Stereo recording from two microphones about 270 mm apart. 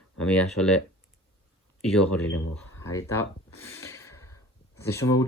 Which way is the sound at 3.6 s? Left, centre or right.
Centre.